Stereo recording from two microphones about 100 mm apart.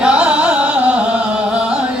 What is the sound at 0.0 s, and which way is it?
Music, 10° right (ahead or behind).